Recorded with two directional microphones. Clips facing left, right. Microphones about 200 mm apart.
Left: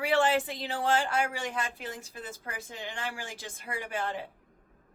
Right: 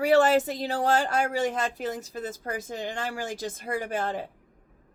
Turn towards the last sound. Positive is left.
turn(degrees=-40)  # may be behind; listen again after turning